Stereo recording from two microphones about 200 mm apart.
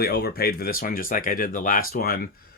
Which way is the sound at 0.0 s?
50° left (ahead or behind).